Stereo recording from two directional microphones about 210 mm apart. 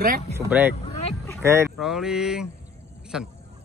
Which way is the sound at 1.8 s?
Centre (ahead or behind).